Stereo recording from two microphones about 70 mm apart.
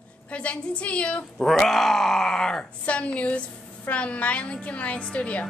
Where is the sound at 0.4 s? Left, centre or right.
Centre.